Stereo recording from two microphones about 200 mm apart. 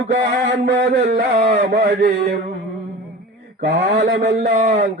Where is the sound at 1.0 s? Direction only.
45° right (ahead or behind).